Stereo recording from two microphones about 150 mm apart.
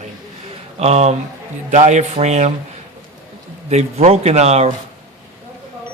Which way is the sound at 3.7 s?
50° right (ahead or behind).